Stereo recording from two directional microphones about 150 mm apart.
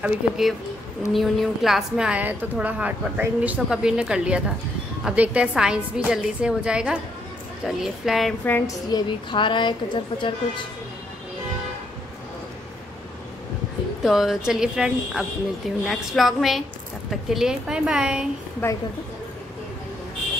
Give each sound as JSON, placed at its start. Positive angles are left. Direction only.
{"t": 0.0, "sound": "a woman's voice", "side_deg": 0}
{"t": 8.9, "sound": "a woman's voice", "side_deg": 30}
{"t": 14.0, "sound": "a woman's voice", "side_deg": 0}
{"t": 18.6, "sound": "a woman's voice", "side_deg": 15}